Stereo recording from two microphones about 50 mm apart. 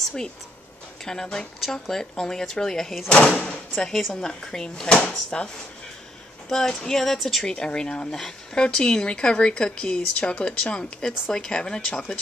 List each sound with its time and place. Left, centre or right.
1.2 s speech: centre
3.1 s speech: centre
3.7 s a woman's voice: centre
6.5 s a woman's voice: centre
7.4 s speech: centre